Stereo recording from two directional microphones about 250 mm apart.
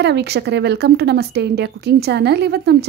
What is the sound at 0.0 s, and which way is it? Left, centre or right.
A woman's voice, right.